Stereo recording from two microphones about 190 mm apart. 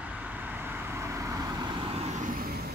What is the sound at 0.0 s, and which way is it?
Vehicle, 10° right (ahead or behind).